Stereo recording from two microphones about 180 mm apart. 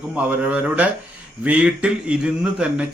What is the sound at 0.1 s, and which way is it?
Speech, 5° right (ahead or behind).